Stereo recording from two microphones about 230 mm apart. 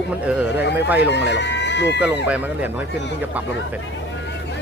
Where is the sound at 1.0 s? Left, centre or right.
Left.